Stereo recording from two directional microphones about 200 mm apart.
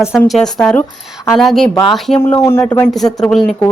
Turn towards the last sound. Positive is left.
turn(degrees=5)  # may be behind; listen again after turning